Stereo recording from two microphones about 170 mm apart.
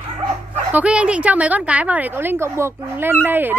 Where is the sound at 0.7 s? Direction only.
10° right (ahead or behind).